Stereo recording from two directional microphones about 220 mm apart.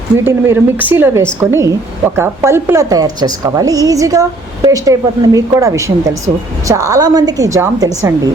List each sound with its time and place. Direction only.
0.3 s a woman's voice: 10° right (ahead or behind)